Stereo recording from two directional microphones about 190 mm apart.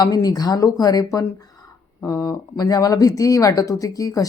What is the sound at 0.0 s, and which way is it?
Speech, 20° left (ahead or behind).